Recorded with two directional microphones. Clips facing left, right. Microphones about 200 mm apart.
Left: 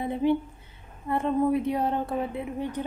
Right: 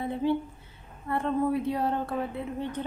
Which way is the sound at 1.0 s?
20° left (ahead or behind).